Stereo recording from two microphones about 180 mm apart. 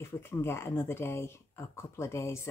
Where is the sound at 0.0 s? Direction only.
15° left (ahead or behind).